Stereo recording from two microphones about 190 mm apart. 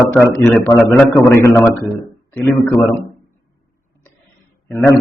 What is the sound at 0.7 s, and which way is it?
A man's voice, 5° left (ahead or behind).